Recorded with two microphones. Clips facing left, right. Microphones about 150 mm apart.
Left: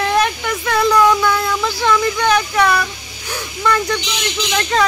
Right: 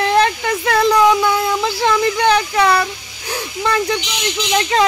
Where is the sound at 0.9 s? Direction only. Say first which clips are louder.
Right 1 dB; 20° right (ahead or behind).